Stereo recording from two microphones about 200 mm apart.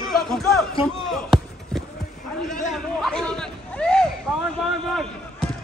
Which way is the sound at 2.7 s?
Centre (ahead or behind).